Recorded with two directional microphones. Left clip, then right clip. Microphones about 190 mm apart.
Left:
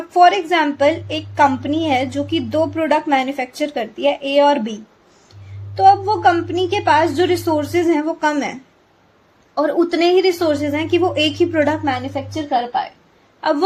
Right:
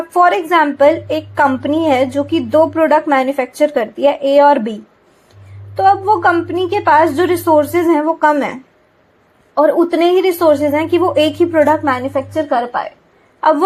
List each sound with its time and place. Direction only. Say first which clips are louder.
0.1 s speech: right 1 dB; 15° right (ahead or behind)
9.6 s speech: right 5 dB; 10° right (ahead or behind)
13.4 s a woman's voice: right 6 dB; 15° right (ahead or behind)